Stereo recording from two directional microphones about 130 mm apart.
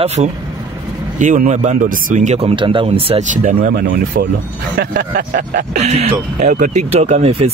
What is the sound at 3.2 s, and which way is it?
Speech, 75° right (ahead or behind).